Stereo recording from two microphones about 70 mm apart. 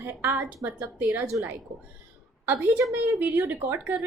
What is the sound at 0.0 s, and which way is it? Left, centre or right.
A woman's voice, right.